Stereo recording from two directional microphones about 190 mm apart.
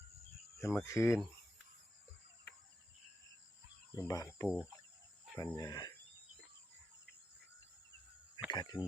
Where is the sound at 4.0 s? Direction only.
20° left (ahead or behind).